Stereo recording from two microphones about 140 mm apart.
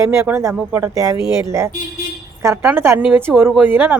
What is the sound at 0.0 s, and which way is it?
Speech, 20° right (ahead or behind).